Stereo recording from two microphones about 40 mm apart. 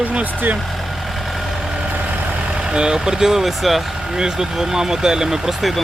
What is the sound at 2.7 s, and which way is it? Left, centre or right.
Speech, centre.